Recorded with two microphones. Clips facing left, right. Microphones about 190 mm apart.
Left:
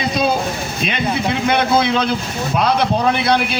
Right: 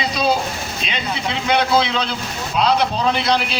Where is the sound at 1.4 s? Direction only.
55° left (ahead or behind).